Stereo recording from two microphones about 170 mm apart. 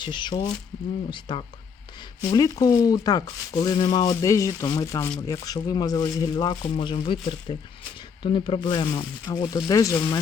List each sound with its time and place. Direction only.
0.0 s speech: 25° left (ahead or behind)